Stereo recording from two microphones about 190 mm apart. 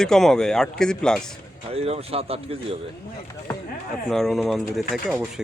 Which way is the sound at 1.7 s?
30° right (ahead or behind).